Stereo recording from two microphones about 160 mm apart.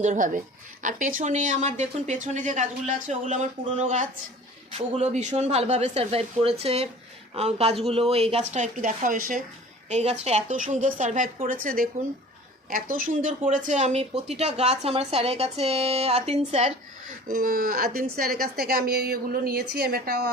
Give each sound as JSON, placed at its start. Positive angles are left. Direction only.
{"t": 0.0, "sound": "a woman's voice", "side_deg": -55}
{"t": 9.9, "sound": "a woman's voice", "side_deg": -40}
{"t": 17.2, "sound": "a woman's voice", "side_deg": -60}